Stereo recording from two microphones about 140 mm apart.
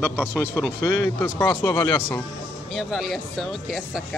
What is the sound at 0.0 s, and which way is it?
Speech, 10° left (ahead or behind).